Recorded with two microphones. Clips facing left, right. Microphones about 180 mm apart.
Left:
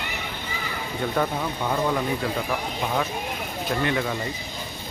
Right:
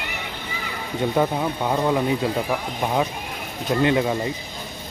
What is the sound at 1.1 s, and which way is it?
Speech, 20° right (ahead or behind).